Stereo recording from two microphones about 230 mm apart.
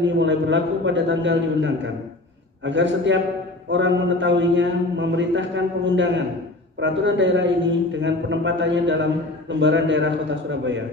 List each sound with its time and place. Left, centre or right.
0.0 s a man's voice: right